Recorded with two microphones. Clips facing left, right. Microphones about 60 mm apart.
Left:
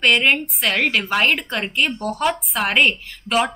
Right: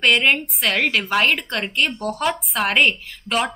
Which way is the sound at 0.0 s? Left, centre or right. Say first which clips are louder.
Even; centre.